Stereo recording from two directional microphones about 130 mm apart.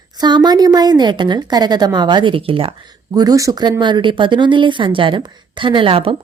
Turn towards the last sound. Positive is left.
turn(degrees=-45)  # may be behind; listen again after turning